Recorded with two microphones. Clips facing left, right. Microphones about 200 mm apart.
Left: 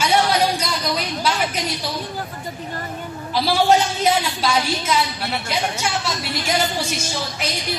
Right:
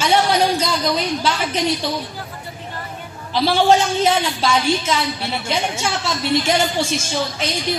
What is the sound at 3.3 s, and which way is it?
A woman's voice, 25° right (ahead or behind).